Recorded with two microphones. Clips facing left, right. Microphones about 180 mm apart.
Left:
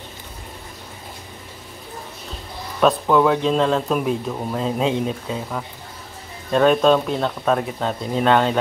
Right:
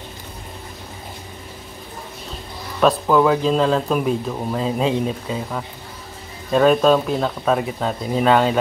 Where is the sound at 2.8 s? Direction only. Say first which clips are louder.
Right 1 dB; centre (ahead or behind).